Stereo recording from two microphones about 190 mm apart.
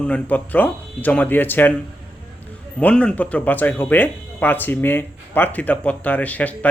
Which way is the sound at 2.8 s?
5° left (ahead or behind).